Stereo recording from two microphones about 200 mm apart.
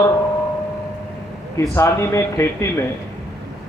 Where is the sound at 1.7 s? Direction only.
15° left (ahead or behind).